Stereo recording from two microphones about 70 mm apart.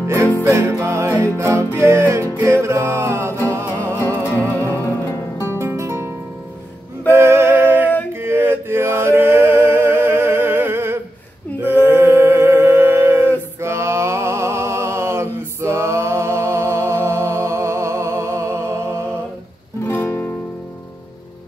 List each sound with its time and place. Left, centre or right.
0.0 s music: right
4.4 s music: left
4.6 s music: left
5.4 s music: right
11.6 s a sound: right
19.9 s music: left